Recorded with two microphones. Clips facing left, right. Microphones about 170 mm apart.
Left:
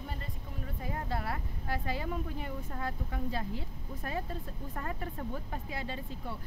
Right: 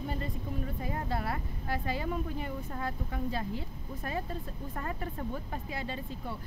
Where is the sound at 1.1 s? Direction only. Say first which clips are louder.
Right 2 dB; 15° right (ahead or behind).